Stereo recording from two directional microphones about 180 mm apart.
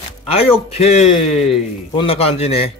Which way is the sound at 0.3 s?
35° left (ahead or behind).